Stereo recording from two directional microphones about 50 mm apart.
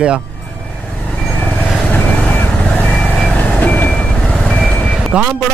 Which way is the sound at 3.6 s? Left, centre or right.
Left.